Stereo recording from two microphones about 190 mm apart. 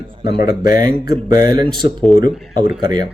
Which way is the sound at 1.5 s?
25° right (ahead or behind).